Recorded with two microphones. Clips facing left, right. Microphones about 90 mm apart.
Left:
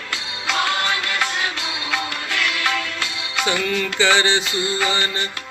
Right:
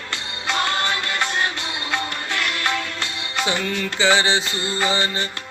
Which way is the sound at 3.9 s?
25° right (ahead or behind).